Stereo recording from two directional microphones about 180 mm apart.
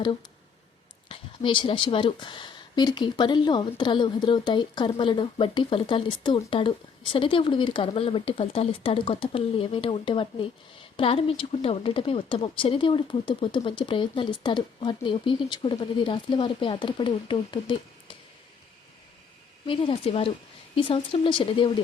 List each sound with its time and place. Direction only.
1.0 s speech: 30° left (ahead or behind)
19.6 s speech: 30° left (ahead or behind)